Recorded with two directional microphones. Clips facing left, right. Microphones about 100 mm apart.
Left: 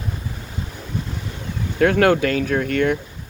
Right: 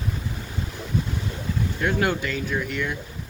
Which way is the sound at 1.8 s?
70° left (ahead or behind).